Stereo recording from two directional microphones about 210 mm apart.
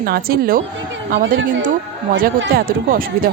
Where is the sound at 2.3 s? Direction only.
50° right (ahead or behind).